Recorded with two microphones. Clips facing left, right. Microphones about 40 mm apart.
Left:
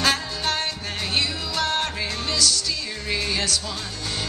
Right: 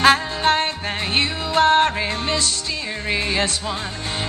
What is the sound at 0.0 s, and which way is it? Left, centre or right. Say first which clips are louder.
Music: right 8 dB; right.